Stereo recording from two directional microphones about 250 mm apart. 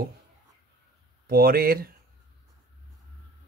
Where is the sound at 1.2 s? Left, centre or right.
Right.